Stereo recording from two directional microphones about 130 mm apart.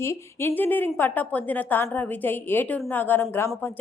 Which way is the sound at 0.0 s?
20° left (ahead or behind).